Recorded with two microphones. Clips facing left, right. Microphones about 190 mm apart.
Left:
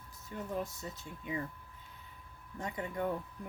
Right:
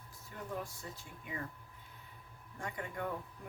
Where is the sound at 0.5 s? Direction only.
20° left (ahead or behind).